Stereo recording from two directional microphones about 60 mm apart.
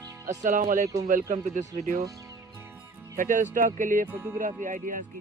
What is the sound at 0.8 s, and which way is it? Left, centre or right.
Speech, right.